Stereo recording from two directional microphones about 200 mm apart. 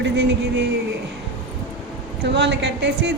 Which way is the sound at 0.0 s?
60° right (ahead or behind).